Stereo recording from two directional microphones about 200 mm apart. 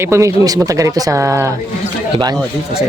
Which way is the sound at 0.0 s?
15° right (ahead or behind).